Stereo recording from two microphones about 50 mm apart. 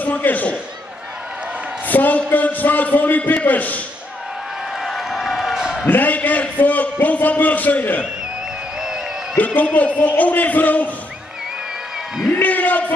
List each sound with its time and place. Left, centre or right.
0.0 s a man's voice: left
1.9 s a man's voice: left
4.8 s a sound: centre
5.9 s a man's voice: left
9.4 s a man's voice: left
12.3 s a man's voice: left